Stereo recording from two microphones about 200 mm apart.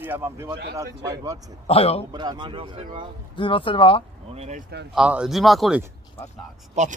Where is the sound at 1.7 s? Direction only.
30° left (ahead or behind).